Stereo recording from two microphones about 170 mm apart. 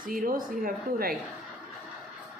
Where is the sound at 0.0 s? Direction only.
55° right (ahead or behind).